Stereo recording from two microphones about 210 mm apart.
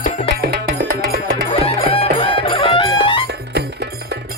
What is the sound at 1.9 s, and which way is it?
Music, 25° left (ahead or behind).